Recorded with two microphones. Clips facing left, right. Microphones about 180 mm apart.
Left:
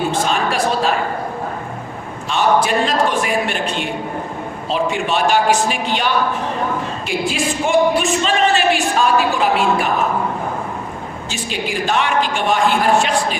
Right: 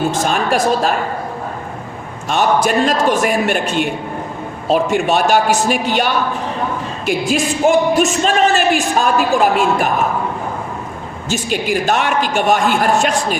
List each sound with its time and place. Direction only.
0.1 s speech: 45° right (ahead or behind)
2.3 s speech: 45° right (ahead or behind)
7.1 s speech: 45° right (ahead or behind)
11.3 s speech: 45° right (ahead or behind)